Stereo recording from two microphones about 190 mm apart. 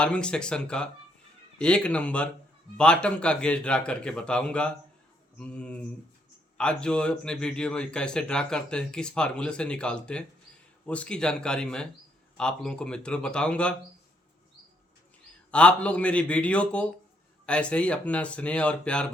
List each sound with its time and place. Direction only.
0.0 s a man's voice: 5° left (ahead or behind)
15.5 s speech: 5° left (ahead or behind)